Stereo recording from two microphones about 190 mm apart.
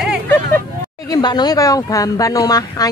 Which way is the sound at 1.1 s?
20° left (ahead or behind).